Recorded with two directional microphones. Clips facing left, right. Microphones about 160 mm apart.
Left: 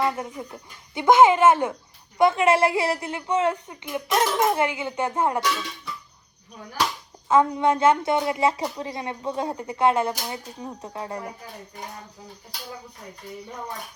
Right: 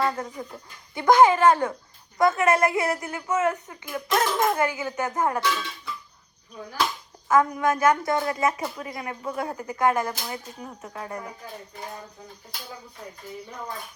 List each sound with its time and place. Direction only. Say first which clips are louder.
0.0 s a woman's voice: left 1 dB; 15° left (ahead or behind)
7.3 s a woman's voice: left 2 dB; 25° left (ahead or behind)
10.9 s a woman's voice: left 2 dB; 30° left (ahead or behind)